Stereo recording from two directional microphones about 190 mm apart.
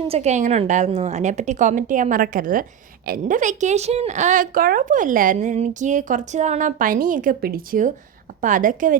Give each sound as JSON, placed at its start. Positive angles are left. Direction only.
{"t": 0.1, "sound": "a woman's voice", "side_deg": -35}